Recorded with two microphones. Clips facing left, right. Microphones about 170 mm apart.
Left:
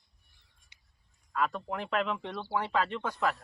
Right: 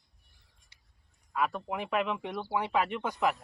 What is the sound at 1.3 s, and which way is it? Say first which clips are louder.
Speech: even; 10° right (ahead or behind).